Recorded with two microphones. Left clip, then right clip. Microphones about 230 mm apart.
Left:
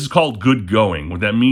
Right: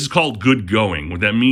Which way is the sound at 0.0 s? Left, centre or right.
Centre.